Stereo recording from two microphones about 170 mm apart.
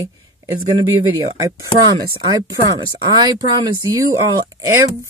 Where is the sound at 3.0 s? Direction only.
25° right (ahead or behind).